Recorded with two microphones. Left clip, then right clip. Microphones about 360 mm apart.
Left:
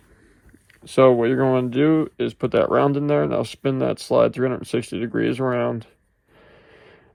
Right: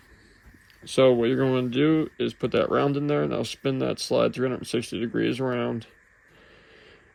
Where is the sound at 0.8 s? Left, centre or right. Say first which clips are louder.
Left 4 dB; centre.